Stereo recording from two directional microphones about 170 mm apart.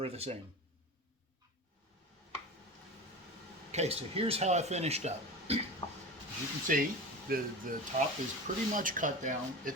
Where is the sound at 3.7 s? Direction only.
40° right (ahead or behind).